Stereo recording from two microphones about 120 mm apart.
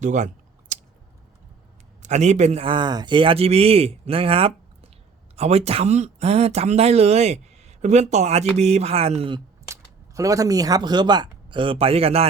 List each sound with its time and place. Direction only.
0.0 s speech: 90° right
0.7 s a sound: 80° right
2.0 s a man's voice: 70° right (ahead or behind)
2.6 s speech: 40° right (ahead or behind); by 9.3 s 60° right (ahead or behind)
10.2 s speech: 30° right (ahead or behind); by 12.3 s 55° right (ahead or behind)